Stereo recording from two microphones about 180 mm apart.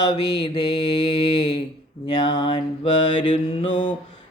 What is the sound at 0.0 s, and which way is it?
Mantra, 25° left (ahead or behind).